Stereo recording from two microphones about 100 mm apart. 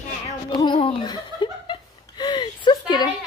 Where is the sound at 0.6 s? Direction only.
65° left (ahead or behind).